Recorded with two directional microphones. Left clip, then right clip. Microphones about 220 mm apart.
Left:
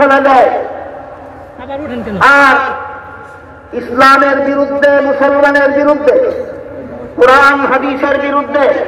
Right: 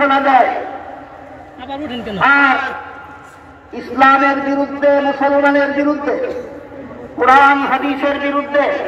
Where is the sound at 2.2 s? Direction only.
35° right (ahead or behind).